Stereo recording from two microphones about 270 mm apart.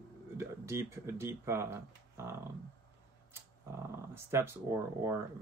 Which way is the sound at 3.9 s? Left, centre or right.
Centre.